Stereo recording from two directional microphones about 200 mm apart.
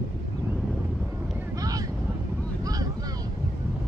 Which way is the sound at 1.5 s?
15° right (ahead or behind).